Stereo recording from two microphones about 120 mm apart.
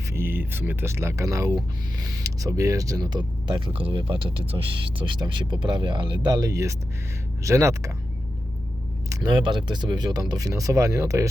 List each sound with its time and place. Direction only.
0.1 s speech: 20° right (ahead or behind); by 3.6 s 35° right (ahead or behind)
3.7 s speech: 50° right (ahead or behind); by 7.9 s 25° right (ahead or behind)
9.4 s speech: 40° right (ahead or behind); by 11.3 s 25° right (ahead or behind)